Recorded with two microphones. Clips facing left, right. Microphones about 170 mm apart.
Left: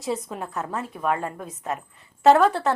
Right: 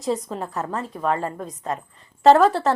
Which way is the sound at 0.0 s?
5° left (ahead or behind).